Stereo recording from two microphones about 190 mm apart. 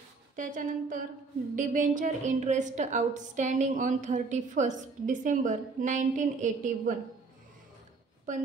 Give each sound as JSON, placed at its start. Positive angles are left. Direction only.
{"t": 0.4, "sound": "a woman's voice", "side_deg": -45}